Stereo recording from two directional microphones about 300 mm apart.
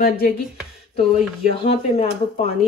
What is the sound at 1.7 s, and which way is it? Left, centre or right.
Speech, centre.